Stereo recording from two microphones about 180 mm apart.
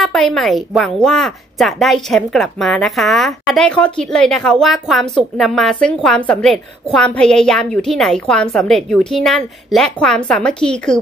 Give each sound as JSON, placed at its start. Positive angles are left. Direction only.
{"t": 0.0, "sound": "a woman's voice", "side_deg": 0}